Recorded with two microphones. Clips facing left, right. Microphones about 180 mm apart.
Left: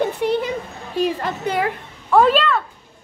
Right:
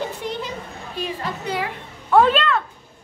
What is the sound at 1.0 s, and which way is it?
Speech, 50° left (ahead or behind).